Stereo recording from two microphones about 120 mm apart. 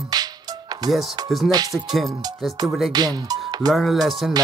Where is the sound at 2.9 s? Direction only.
35° right (ahead or behind).